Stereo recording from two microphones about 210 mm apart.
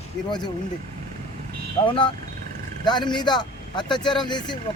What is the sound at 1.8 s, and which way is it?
A man's voice, 25° left (ahead or behind).